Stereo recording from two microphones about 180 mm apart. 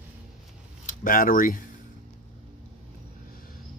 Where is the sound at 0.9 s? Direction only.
50° left (ahead or behind).